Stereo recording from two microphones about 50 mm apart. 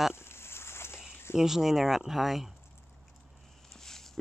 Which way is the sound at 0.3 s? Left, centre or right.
Left.